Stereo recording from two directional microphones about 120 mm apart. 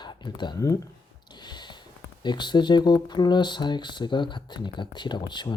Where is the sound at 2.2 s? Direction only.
40° left (ahead or behind).